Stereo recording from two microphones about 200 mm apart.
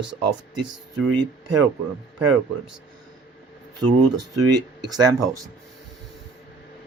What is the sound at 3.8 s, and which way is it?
Speech, 20° right (ahead or behind).